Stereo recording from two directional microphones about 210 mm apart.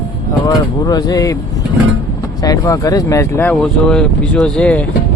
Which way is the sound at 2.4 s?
15° left (ahead or behind).